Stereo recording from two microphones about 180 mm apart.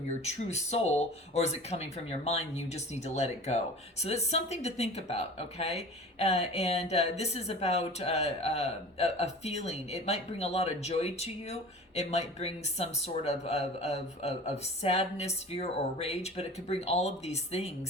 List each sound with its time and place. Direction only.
0.3 s speech: 35° left (ahead or behind)